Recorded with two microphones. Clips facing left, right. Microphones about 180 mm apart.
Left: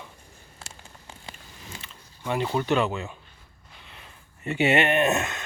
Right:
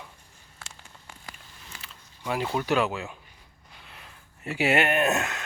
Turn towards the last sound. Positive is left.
turn(degrees=0)  # may be behind; listen again after turning